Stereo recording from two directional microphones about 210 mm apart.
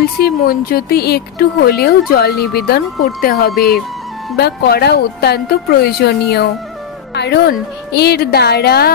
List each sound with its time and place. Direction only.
0.0 s speech: 45° left (ahead or behind)